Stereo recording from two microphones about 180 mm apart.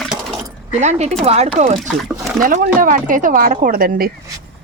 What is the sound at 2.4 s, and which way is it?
Speech, 50° right (ahead or behind).